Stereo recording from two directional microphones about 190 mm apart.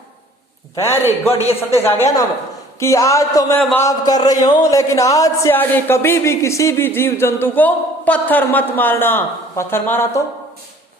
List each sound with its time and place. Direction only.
1.3 s speech: 30° left (ahead or behind)
1.7 s speech: 10° left (ahead or behind)
3.6 s a man's voice: 5° left (ahead or behind)
3.8 s speech: 20° left (ahead or behind)